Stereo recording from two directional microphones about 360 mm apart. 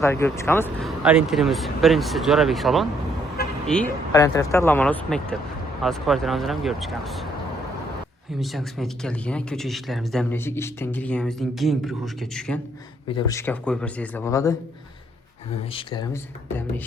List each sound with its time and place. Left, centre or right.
0.0 s speech: centre
8.4 s speech: centre
15.7 s speech: centre